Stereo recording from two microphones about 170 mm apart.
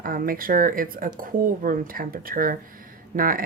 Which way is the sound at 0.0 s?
55° right (ahead or behind).